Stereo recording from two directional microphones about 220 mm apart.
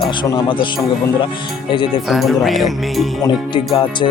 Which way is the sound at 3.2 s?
20° left (ahead or behind).